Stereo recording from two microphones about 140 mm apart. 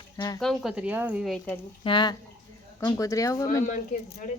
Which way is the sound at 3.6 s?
65° left (ahead or behind).